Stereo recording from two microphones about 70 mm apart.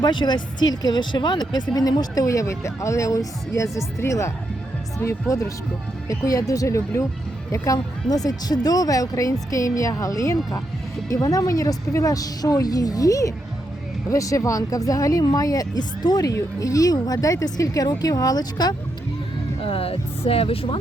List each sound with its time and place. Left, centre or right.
0.0 s speech: left
1.5 s speech: left